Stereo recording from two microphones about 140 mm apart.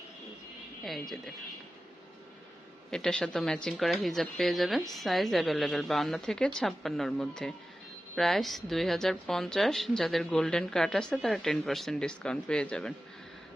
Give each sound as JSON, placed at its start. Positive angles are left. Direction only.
{"t": 0.9, "sound": "a woman's voice", "side_deg": 0}
{"t": 2.9, "sound": "a woman's voice", "side_deg": 5}